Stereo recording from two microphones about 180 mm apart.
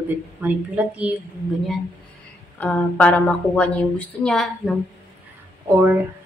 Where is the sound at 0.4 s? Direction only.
10° right (ahead or behind).